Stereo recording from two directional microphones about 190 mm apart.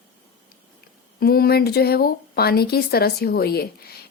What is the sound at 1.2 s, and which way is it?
A woman's voice, 55° left (ahead or behind).